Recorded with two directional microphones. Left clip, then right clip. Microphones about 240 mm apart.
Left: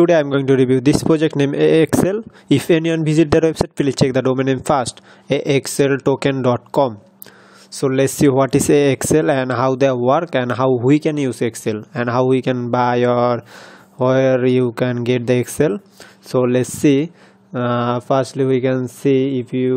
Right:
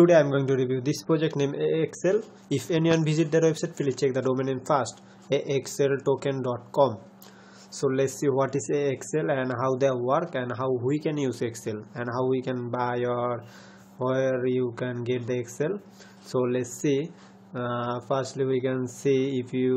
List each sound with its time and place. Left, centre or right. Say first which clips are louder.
0.0 s speech: left 5 dB; left
3.3 s speech: left 8 dB; left